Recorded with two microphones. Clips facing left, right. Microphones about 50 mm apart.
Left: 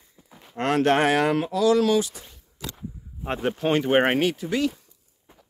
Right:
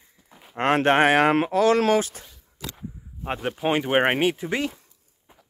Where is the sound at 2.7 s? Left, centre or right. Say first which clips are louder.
Even; centre.